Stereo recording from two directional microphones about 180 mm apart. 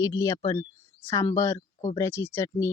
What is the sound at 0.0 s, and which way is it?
Speech, 20° left (ahead or behind).